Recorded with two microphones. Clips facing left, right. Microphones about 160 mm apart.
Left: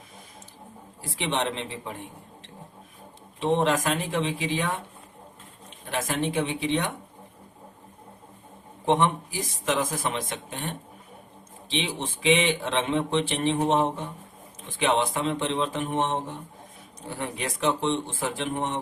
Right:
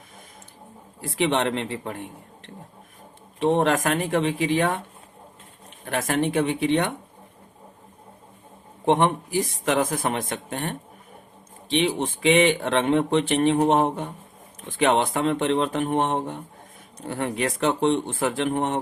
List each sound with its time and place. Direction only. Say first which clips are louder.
1.0 s speech: right 5 dB; 60° right (ahead or behind)
5.8 s speech: right 4 dB; 55° right (ahead or behind)
8.9 s speech: right 3 dB; 55° right (ahead or behind)